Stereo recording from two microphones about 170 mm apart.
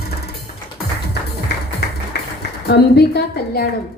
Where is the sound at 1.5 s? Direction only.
75° left (ahead or behind).